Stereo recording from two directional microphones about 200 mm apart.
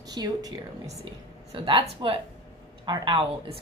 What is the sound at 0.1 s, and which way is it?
Speech, 20° right (ahead or behind).